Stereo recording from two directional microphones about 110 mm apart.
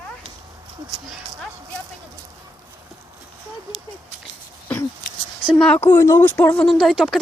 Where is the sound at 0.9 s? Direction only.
Centre (ahead or behind).